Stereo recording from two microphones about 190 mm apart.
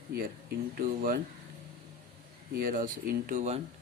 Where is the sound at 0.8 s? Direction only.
50° right (ahead or behind).